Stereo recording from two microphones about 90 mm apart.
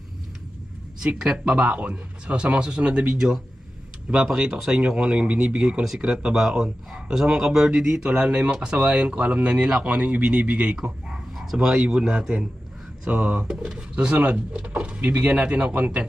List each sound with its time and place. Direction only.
1.0 s speech: 10° right (ahead or behind)